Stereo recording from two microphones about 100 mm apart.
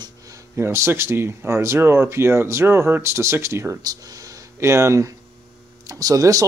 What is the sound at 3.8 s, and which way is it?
Speech, 40° right (ahead or behind).